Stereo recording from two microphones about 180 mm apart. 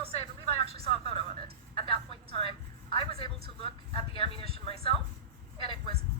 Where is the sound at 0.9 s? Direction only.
30° left (ahead or behind).